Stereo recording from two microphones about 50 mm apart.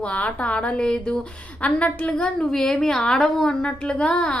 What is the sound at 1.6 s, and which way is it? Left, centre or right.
Speech, left.